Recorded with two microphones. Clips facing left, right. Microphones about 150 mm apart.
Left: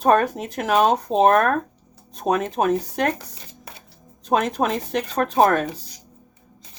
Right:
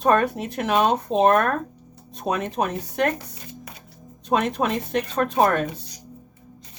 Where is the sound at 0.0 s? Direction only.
40° left (ahead or behind).